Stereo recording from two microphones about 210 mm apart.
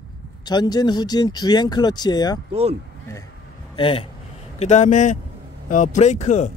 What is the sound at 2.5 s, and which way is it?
Speech, 30° right (ahead or behind).